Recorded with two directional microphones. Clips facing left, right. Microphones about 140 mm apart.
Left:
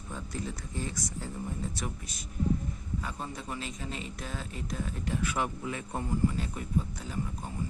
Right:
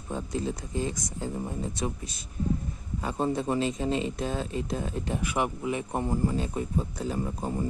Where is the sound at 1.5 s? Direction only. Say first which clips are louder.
Right 5 dB; 25° right (ahead or behind).